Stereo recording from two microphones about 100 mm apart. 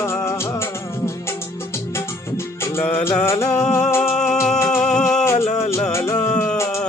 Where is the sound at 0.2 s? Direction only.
25° left (ahead or behind).